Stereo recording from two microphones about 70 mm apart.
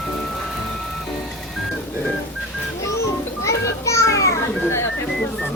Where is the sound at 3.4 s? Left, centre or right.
Left.